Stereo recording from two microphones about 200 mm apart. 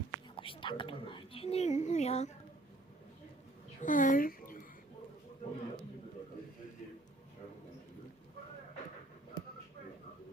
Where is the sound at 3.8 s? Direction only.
40° left (ahead or behind).